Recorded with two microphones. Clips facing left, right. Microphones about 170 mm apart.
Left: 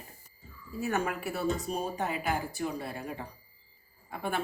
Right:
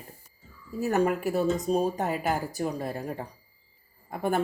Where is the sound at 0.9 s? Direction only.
35° right (ahead or behind).